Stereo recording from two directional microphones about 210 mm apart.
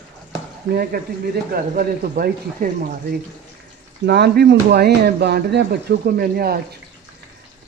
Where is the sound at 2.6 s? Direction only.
40° right (ahead or behind).